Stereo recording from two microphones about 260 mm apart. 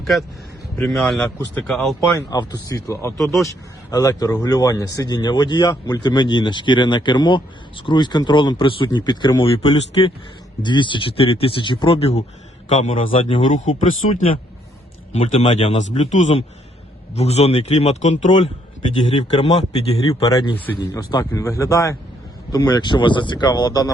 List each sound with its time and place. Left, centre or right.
0.0 s speech: centre
2.1 s speech: centre
3.2 s speech: centre
3.9 s speech: centre
15.1 s speech: left